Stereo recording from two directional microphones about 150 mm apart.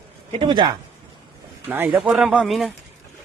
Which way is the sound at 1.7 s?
15° right (ahead or behind).